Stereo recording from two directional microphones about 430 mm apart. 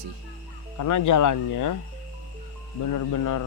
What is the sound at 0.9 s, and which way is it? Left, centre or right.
Speech, left.